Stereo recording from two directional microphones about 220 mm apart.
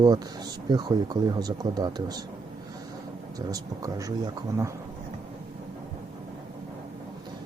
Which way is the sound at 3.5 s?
15° right (ahead or behind).